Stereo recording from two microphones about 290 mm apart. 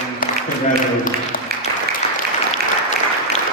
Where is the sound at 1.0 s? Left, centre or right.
Left.